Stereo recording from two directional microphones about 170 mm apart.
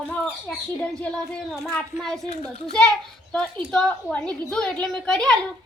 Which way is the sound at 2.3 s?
40° left (ahead or behind).